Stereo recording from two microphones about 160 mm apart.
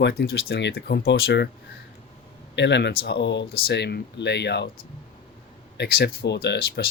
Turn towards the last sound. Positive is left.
turn(degrees=90)